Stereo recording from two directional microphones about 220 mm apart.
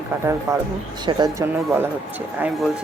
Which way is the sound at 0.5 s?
15° right (ahead or behind).